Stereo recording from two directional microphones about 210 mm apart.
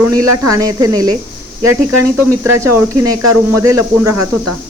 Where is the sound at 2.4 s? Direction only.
15° right (ahead or behind).